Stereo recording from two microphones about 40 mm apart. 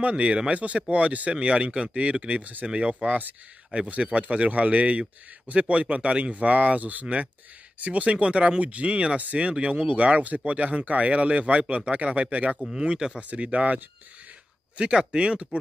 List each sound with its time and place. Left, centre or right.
0.0 s speech: right
12.8 s speech: right
13.3 s speech: right
14.8 s speech: right